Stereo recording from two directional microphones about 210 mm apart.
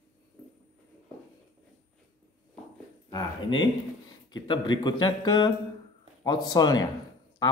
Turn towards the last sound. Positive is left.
turn(degrees=20)  # may be behind; listen again after turning